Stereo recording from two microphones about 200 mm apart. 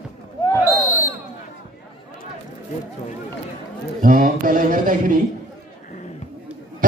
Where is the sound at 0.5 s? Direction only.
15° left (ahead or behind).